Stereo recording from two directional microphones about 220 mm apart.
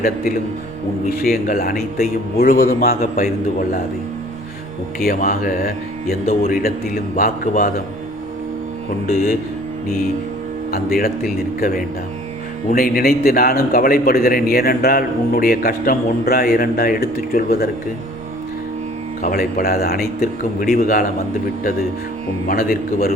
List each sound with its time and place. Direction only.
1.1 s speech: 40° left (ahead or behind)
4.9 s speech: 40° left (ahead or behind)
10.7 s speech: 40° left (ahead or behind)
12.7 s a man's voice: 40° left (ahead or behind)
19.2 s speech: 40° left (ahead or behind)
22.4 s speech: 40° left (ahead or behind)